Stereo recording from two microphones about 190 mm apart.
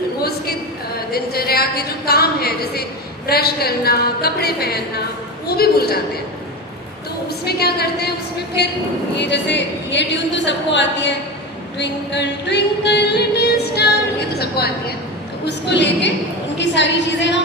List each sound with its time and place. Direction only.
0.2 s a sound: 55° left (ahead or behind)
1.1 s a woman's voice: 55° left (ahead or behind)
3.2 s music: 55° left (ahead or behind)
7.4 s music: 55° left (ahead or behind)
9.1 s speech: 65° left (ahead or behind)
11.8 s music: 65° left (ahead or behind)
16.6 s speech: 70° left (ahead or behind)